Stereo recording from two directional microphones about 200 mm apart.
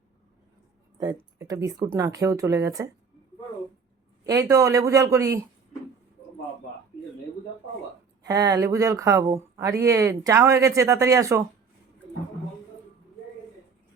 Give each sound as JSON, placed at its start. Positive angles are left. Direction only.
{"t": 0.9, "sound": "speech", "side_deg": -20}
{"t": 4.3, "sound": "speech", "side_deg": -15}
{"t": 8.2, "sound": "speech", "side_deg": -20}